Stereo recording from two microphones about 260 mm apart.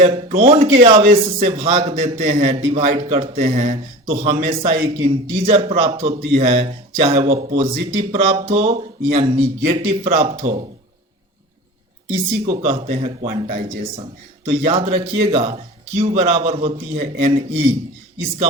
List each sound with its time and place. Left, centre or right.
0.0 s speech: right
12.1 s speech: right